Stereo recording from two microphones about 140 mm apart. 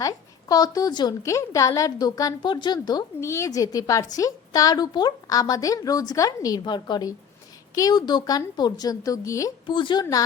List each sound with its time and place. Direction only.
0.0 s a woman's voice: 25° left (ahead or behind)
9.7 s a woman's voice: 35° left (ahead or behind)